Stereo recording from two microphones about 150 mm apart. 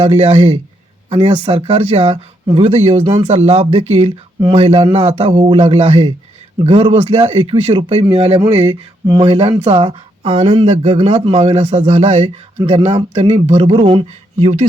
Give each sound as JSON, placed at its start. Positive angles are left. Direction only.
{"t": 0.0, "sound": "speech", "side_deg": -45}
{"t": 1.1, "sound": "speech", "side_deg": -35}
{"t": 8.7, "sound": "speech", "side_deg": -25}
{"t": 9.2, "sound": "speech", "side_deg": -40}